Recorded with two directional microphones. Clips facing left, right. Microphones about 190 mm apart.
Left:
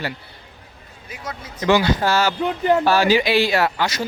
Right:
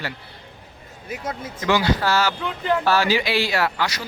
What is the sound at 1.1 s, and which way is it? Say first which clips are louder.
Speech: right 4 dB; 50° right (ahead or behind).